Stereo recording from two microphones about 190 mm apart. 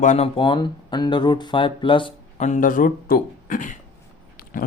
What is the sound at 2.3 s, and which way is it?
Speech, 40° left (ahead or behind).